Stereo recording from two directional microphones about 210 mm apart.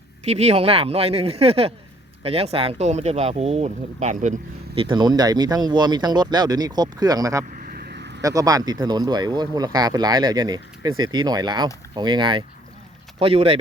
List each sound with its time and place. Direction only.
0.3 s speech: 30° right (ahead or behind)
7.6 s vehicle: 45° right (ahead or behind)
8.2 s speech: 15° right (ahead or behind)